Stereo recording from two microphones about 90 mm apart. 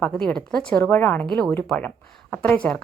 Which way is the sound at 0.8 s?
20° left (ahead or behind).